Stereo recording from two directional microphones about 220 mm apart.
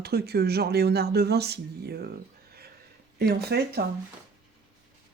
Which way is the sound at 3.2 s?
45° right (ahead or behind).